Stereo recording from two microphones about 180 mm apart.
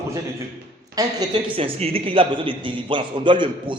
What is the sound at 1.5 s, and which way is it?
A man's voice, 30° right (ahead or behind).